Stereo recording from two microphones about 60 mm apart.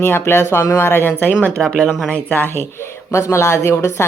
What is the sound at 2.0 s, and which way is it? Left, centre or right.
Speech, left.